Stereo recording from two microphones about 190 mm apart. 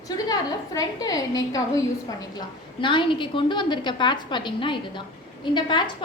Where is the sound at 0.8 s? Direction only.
20° left (ahead or behind).